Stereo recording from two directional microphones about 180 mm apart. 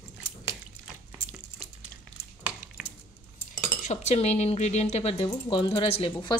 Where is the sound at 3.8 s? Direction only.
40° left (ahead or behind).